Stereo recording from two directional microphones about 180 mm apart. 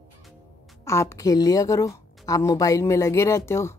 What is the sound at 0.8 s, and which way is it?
Speech, 15° left (ahead or behind).